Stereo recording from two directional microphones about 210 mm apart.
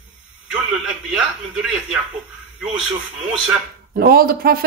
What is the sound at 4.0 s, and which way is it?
Speech, 45° right (ahead or behind).